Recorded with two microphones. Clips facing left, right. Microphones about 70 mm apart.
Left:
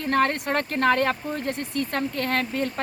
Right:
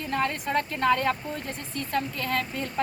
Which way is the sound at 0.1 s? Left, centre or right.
Left.